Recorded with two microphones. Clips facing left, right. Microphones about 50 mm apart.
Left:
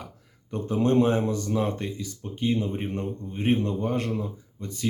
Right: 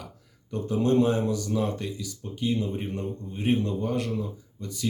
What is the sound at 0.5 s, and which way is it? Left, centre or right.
Speech, left.